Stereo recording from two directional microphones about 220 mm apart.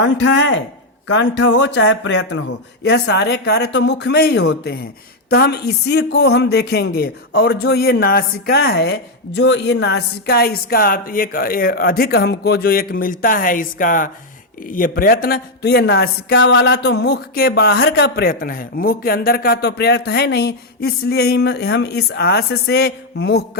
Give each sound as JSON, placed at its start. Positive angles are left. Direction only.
{"t": 0.0, "sound": "speech", "side_deg": 55}